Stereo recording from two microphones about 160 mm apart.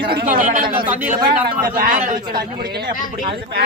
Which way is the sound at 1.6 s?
65° right (ahead or behind).